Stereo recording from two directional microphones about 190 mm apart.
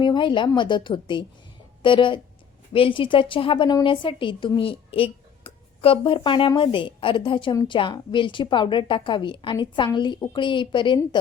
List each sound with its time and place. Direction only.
0.0 s a woman's voice: 25° left (ahead or behind)